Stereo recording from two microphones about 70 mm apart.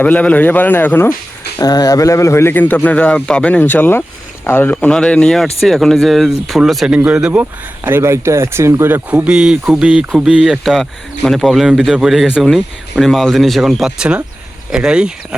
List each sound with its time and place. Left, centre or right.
0.0 s a man's voice: left
1.5 s speech: left
2.6 s a man's voice: left
3.6 s a man's voice: left
4.9 s speech: centre
6.8 s speech: centre
7.9 s speech: right
8.9 s speech: centre